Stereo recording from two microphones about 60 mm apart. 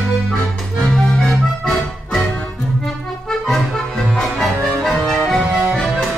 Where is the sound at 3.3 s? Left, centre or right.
Centre.